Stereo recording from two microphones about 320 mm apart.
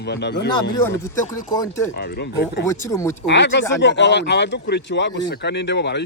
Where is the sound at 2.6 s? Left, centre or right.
Centre.